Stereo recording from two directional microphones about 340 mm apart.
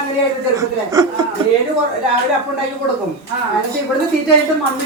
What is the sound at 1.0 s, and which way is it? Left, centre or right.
Speech, centre.